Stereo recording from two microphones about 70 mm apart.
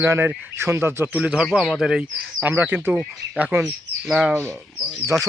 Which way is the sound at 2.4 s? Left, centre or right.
Right.